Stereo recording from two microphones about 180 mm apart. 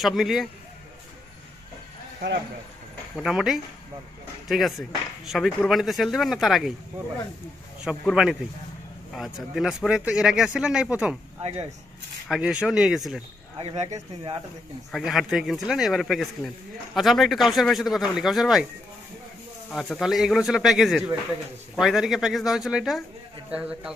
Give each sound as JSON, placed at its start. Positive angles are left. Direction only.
{"t": 0.0, "sound": "speech", "side_deg": 0}
{"t": 3.2, "sound": "speech", "side_deg": 0}
{"t": 7.9, "sound": "speech", "side_deg": -5}
{"t": 12.3, "sound": "speech", "side_deg": -5}
{"t": 13.6, "sound": "speech", "side_deg": -35}
{"t": 14.9, "sound": "speech", "side_deg": 0}
{"t": 19.7, "sound": "a man's voice", "side_deg": 0}